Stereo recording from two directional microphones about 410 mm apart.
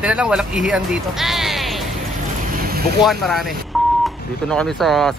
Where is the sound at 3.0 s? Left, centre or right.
Centre.